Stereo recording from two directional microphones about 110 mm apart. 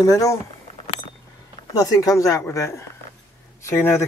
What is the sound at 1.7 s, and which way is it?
Speech, 35° left (ahead or behind).